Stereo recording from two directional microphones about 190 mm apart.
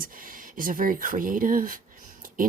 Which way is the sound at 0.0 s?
45° right (ahead or behind).